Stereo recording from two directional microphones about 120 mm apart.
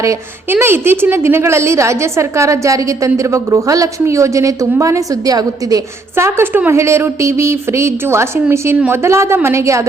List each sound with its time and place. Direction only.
0.0 s a woman's voice: 20° right (ahead or behind)